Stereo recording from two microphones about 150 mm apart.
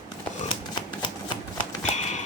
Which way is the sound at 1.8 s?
50° left (ahead or behind).